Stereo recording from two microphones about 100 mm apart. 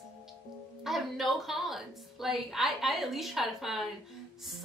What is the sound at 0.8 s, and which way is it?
A woman's voice, centre (ahead or behind).